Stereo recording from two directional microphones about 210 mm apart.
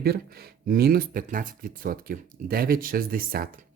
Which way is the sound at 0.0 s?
45° right (ahead or behind).